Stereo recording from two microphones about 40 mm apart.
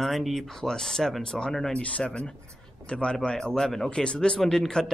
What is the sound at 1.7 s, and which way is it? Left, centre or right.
A man's voice, left.